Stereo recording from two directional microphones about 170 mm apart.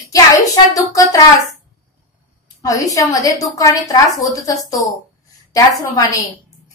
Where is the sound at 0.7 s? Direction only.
20° left (ahead or behind).